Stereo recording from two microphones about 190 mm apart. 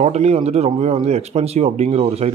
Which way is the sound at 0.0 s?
35° right (ahead or behind).